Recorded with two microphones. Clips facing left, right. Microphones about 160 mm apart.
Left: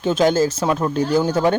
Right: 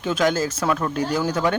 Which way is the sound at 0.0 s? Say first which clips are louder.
Left 5 dB; 30° left (ahead or behind).